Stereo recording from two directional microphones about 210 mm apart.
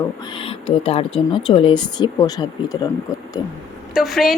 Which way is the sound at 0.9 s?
25° left (ahead or behind).